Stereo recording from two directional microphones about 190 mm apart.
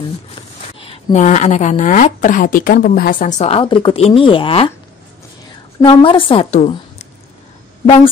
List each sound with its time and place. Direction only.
0.8 s a woman's voice: 35° left (ahead or behind)
5.8 s a woman's voice: 25° left (ahead or behind)